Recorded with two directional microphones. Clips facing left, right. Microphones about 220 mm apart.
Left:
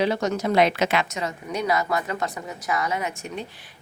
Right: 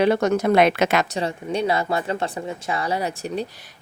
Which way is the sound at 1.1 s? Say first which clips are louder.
Right 4 dB; 30° right (ahead or behind).